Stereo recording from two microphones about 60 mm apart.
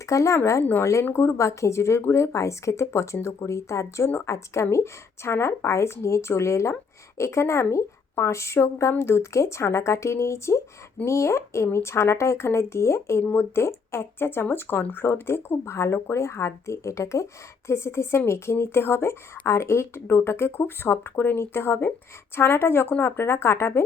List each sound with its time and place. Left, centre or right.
0.0 s speech: left
13.2 s speech: left